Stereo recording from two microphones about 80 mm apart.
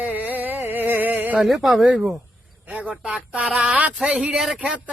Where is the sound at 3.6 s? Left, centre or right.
Centre.